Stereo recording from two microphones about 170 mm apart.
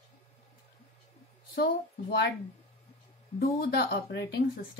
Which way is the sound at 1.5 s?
65° left (ahead or behind).